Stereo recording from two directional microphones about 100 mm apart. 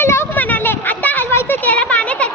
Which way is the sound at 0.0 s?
25° left (ahead or behind).